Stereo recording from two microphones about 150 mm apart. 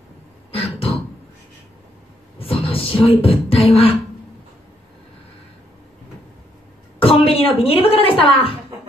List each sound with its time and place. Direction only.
0.5 s throat clearing: 40° left (ahead or behind)
2.3 s beatboxing: 40° left (ahead or behind)
7.0 s a sound: 40° left (ahead or behind)